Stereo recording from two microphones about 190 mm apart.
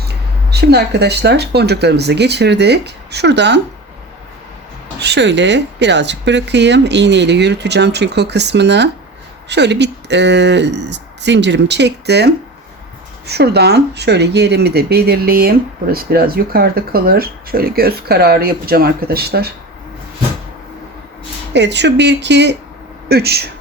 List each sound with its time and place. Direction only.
0.5 s speech: 60° right (ahead or behind)
4.9 s speech: 65° right (ahead or behind)
21.5 s speech: 65° right (ahead or behind)